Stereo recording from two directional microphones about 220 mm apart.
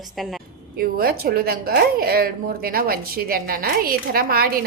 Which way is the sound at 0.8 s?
40° right (ahead or behind).